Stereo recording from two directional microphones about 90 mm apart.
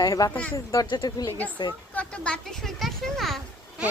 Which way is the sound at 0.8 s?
50° left (ahead or behind).